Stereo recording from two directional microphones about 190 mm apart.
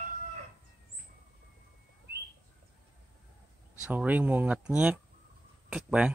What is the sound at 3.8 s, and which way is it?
Speech, 5° right (ahead or behind).